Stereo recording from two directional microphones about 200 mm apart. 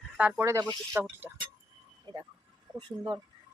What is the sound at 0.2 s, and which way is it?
A woman's voice, 10° right (ahead or behind).